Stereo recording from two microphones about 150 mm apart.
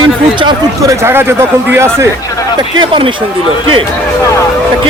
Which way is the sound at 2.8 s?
35° right (ahead or behind).